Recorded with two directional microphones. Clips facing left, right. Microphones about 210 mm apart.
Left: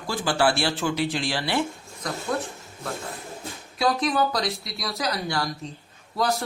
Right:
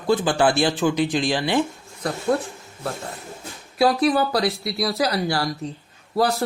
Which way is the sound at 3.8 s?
35° right (ahead or behind).